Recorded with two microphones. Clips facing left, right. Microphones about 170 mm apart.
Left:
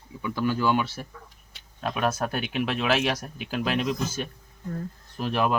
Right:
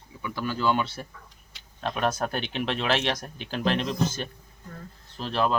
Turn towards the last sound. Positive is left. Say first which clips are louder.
# left 1 dB
turn(degrees=10)  # may be behind; listen again after turning